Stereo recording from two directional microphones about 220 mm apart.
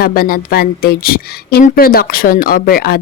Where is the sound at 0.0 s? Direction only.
40° left (ahead or behind).